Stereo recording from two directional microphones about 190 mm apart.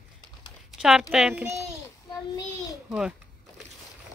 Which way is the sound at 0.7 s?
Centre (ahead or behind).